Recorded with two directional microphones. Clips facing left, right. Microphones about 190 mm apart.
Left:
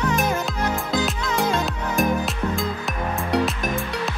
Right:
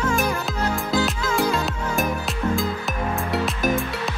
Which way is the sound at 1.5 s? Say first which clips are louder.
Left 1 dB; centre (ahead or behind).